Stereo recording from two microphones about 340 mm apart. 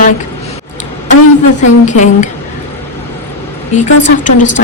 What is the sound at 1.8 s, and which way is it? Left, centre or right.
Speech, left.